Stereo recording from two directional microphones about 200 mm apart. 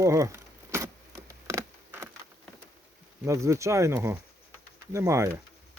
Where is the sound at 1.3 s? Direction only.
15° right (ahead or behind).